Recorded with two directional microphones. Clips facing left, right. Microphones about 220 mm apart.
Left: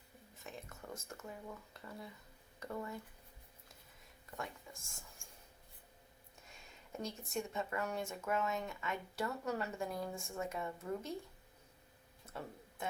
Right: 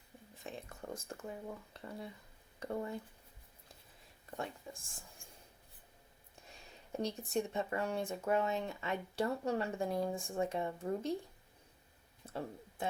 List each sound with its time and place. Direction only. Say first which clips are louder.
0.4 s speech: right 4 dB; 30° right (ahead or behind)
4.7 s speech: right 6 dB; 30° right (ahead or behind)
6.5 s speech: right 5 dB; 35° right (ahead or behind)
12.2 s a sound: right 5 dB; 35° right (ahead or behind)